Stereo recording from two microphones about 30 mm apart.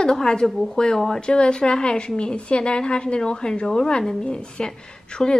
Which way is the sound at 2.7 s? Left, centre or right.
Left.